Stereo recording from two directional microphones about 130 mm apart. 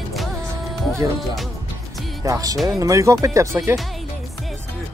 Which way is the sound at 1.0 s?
20° right (ahead or behind).